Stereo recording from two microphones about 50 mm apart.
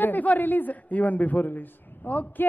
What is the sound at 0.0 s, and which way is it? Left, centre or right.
Speech, left.